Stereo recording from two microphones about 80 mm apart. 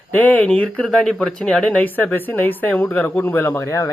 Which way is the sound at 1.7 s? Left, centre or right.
Left.